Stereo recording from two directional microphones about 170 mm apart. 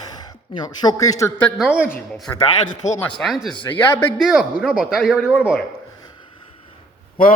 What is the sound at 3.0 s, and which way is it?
Speech, 5° left (ahead or behind).